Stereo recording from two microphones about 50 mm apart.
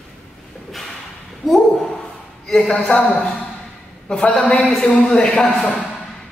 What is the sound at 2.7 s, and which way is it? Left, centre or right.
Speech, centre.